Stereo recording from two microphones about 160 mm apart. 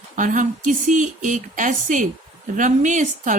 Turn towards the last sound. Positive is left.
turn(degrees=-50)  # may be behind; listen again after turning